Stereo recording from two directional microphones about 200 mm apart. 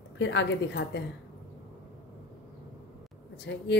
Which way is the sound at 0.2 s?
65° left (ahead or behind).